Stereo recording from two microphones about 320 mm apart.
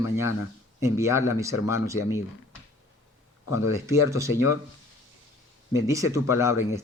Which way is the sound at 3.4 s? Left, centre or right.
Left.